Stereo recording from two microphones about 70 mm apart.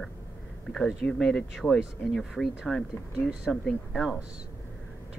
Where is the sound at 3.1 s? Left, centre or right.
Centre.